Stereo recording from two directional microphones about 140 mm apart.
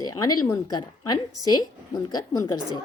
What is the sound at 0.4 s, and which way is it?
A woman's voice, 25° left (ahead or behind).